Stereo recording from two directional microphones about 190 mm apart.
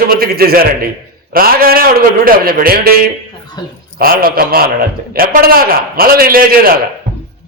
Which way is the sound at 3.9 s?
50° right (ahead or behind).